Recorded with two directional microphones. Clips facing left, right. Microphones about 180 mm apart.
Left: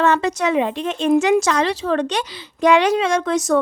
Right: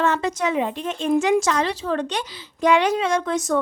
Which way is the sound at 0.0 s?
75° left (ahead or behind).